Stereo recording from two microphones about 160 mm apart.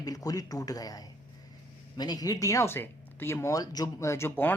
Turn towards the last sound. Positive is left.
turn(degrees=15)  # may be behind; listen again after turning